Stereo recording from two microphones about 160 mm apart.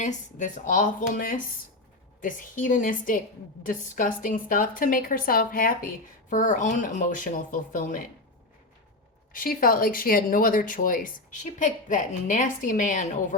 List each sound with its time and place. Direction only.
0.0 s speech: 50° left (ahead or behind)
6.3 s speech: 50° left (ahead or behind)
9.3 s speech: 60° left (ahead or behind)